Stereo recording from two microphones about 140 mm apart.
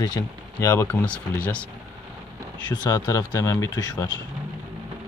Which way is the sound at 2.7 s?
25° left (ahead or behind).